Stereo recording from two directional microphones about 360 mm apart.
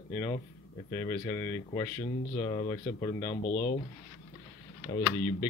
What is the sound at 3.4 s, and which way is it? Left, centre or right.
Speech, left.